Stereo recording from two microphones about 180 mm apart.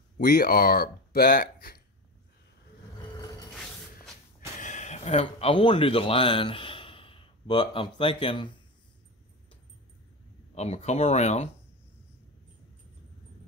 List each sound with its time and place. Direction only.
0.2 s speech: 60° left (ahead or behind)
4.6 s speech: 40° left (ahead or behind)
10.5 s speech: 35° left (ahead or behind)